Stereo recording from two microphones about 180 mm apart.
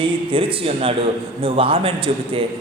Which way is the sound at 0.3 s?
30° right (ahead or behind).